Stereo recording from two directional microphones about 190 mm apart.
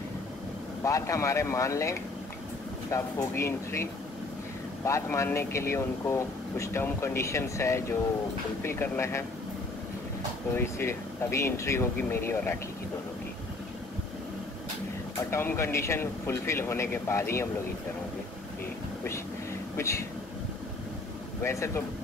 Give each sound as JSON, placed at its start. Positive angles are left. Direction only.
{"t": 0.8, "sound": "speech", "side_deg": 15}
{"t": 10.5, "sound": "speech", "side_deg": 15}
{"t": 15.3, "sound": "speech", "side_deg": 15}
{"t": 21.4, "sound": "speech", "side_deg": 15}